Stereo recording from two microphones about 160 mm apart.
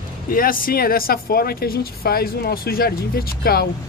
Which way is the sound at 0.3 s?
65° left (ahead or behind).